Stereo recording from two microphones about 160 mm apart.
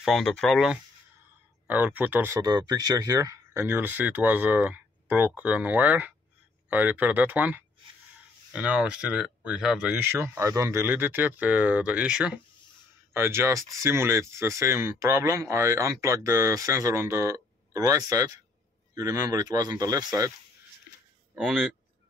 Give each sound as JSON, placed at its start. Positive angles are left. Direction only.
{"t": 0.0, "sound": "speech", "side_deg": 0}
{"t": 21.4, "sound": "speech", "side_deg": 0}